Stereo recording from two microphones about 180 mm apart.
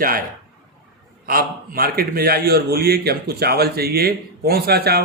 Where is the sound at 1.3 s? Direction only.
55° right (ahead or behind).